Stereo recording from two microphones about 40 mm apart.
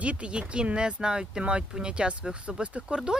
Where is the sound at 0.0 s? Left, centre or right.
Right.